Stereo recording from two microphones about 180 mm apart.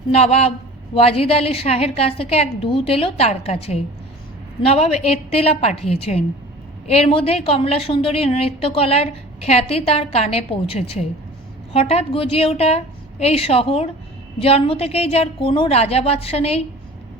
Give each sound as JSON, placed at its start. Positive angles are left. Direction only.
{"t": 0.1, "sound": "a woman's voice", "side_deg": 35}